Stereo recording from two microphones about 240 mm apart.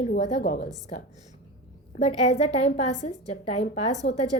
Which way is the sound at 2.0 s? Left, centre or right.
Left.